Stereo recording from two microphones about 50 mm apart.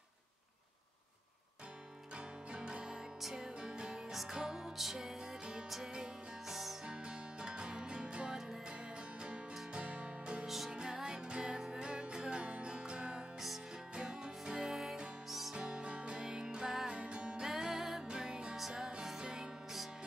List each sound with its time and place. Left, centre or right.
2.5 s music: centre
6.9 s music: centre
10.4 s music: centre
10.7 s music: centre
14.6 s music: centre
15.5 s music: centre
16.9 s music: right